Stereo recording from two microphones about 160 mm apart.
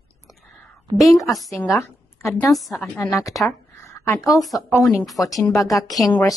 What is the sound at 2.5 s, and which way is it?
Speech, centre (ahead or behind).